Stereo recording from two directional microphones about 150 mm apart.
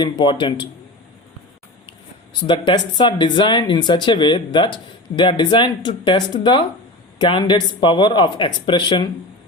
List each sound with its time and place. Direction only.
0.0 s speech: 30° left (ahead or behind)
1.9 s speech: 30° left (ahead or behind)